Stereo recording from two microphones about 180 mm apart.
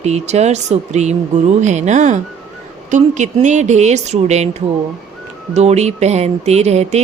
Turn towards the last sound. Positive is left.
turn(degrees=-40)  # may be behind; listen again after turning